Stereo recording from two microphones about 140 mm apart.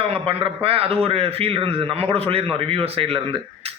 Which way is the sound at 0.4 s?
45° right (ahead or behind).